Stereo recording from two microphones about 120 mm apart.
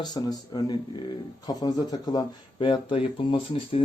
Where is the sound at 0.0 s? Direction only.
35° left (ahead or behind).